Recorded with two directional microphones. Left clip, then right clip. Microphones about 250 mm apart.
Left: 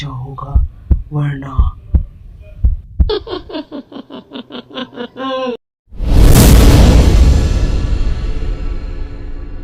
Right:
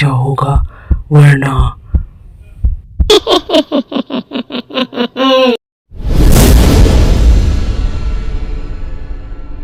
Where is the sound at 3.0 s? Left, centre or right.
Right.